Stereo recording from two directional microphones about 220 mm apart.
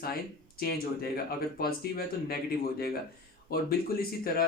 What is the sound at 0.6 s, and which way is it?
Speech, 45° left (ahead or behind).